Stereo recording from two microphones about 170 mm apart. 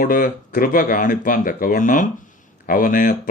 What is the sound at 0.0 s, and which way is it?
A man's voice, 55° left (ahead or behind).